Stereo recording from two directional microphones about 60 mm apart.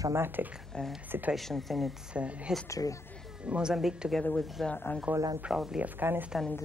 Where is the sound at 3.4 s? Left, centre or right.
Centre.